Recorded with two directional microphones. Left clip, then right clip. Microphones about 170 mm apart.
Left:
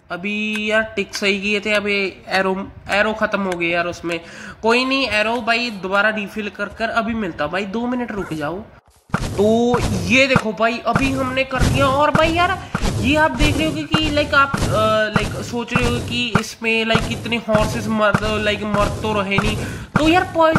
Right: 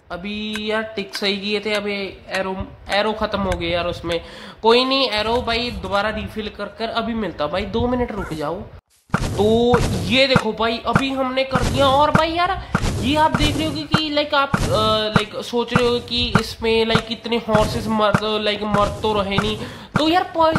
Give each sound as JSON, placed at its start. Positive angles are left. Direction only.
{"t": 0.6, "sound": "speech", "side_deg": 15}
{"t": 9.1, "sound": "a sound", "side_deg": 0}
{"t": 9.7, "sound": "speech", "side_deg": 0}
{"t": 10.0, "sound": "speech", "side_deg": 15}
{"t": 10.9, "sound": "speech", "side_deg": 0}